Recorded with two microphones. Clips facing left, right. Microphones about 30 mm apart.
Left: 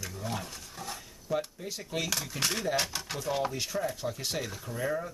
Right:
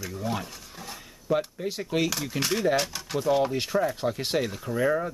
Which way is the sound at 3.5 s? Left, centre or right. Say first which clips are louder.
Right 7 dB; right.